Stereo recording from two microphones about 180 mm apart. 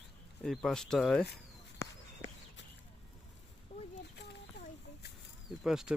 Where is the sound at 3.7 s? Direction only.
35° left (ahead or behind).